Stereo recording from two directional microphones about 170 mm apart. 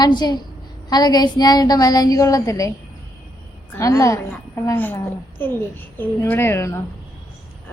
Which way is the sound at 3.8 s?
20° left (ahead or behind).